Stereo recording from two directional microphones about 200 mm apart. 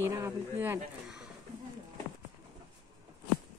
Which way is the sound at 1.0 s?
5° right (ahead or behind).